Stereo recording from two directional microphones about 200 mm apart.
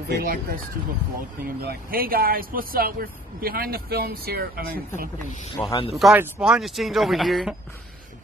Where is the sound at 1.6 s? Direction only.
50° right (ahead or behind).